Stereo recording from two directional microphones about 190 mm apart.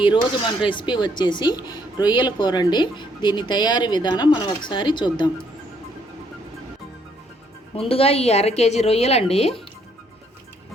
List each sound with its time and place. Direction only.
0.0 s speech: 25° left (ahead or behind)
7.8 s a woman's voice: 30° left (ahead or behind)